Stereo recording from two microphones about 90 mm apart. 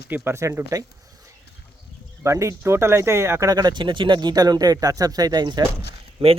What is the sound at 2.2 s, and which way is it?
Speech, 35° right (ahead or behind).